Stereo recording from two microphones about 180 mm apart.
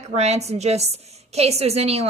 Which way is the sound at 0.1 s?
35° right (ahead or behind).